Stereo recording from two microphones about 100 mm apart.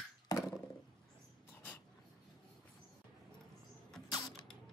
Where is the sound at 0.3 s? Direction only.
40° left (ahead or behind).